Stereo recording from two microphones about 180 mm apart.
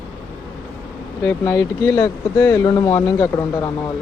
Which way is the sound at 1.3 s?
10° left (ahead or behind).